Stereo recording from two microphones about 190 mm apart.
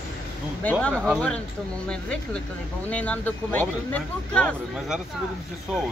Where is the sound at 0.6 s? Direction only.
5° left (ahead or behind).